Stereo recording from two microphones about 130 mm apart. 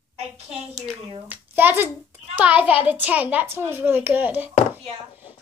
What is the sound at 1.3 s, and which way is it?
A child's voice, 15° right (ahead or behind).